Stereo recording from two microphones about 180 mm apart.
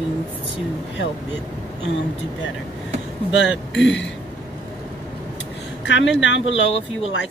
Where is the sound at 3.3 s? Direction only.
90° left.